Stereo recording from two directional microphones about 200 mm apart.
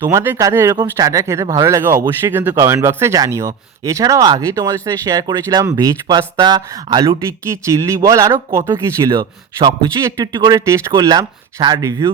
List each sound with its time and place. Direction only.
0.0 s speech: 10° right (ahead or behind)